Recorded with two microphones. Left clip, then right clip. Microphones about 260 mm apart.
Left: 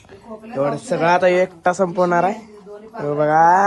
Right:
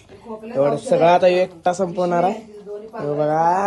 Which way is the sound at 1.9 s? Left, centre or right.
Left.